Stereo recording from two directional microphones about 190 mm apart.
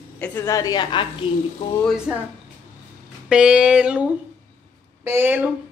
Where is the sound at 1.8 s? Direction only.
5° right (ahead or behind).